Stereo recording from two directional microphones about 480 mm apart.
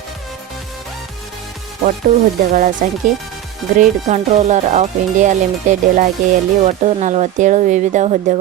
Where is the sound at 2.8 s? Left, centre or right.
Centre.